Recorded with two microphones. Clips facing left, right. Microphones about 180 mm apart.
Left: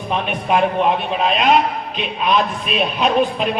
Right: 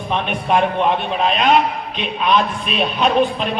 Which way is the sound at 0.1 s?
5° left (ahead or behind).